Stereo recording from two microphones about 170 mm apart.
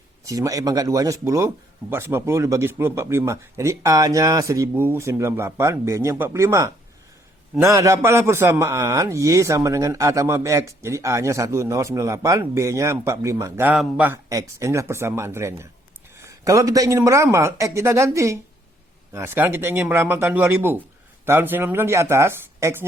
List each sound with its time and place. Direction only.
0.3 s a man's voice: 20° right (ahead or behind)
14.3 s a man's voice: 20° right (ahead or behind)